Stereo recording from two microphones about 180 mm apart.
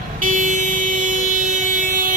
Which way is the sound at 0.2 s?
50° right (ahead or behind).